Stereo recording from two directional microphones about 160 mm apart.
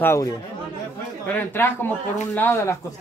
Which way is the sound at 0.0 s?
15° left (ahead or behind).